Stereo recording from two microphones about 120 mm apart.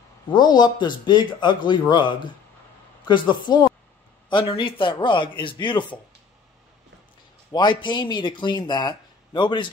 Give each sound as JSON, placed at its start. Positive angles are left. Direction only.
{"t": 0.3, "sound": "speech", "side_deg": 35}
{"t": 7.5, "sound": "speech", "side_deg": 40}